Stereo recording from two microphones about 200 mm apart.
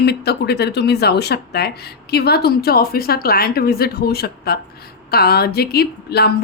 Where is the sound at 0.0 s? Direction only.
55° left (ahead or behind).